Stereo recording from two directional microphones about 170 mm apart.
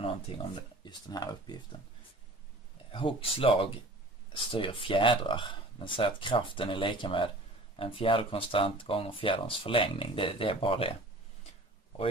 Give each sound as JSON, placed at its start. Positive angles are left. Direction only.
{"t": 0.6, "sound": "speech", "side_deg": 25}
{"t": 2.9, "sound": "speech", "side_deg": 30}